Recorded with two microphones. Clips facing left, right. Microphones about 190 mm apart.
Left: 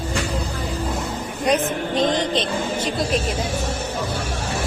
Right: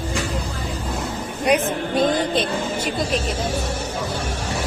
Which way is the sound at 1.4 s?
10° right (ahead or behind).